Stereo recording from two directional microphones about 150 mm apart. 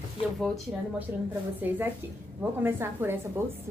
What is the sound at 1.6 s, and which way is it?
A woman's voice, 10° right (ahead or behind).